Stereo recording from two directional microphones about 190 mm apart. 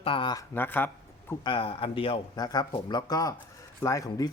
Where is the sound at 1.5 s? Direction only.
30° left (ahead or behind).